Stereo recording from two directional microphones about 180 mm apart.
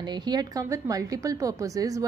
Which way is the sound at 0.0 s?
25° right (ahead or behind).